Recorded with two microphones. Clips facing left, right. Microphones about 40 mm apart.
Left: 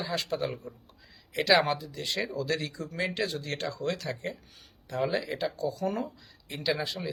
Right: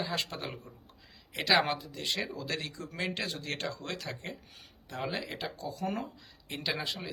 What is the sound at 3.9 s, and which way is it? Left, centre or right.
Speech, centre.